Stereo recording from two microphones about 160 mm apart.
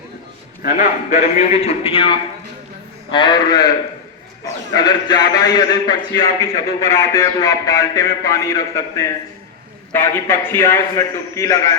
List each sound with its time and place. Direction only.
0.6 s a man's voice: 50° left (ahead or behind); by 3.7 s 25° left (ahead or behind)
4.7 s a man's voice: 25° left (ahead or behind)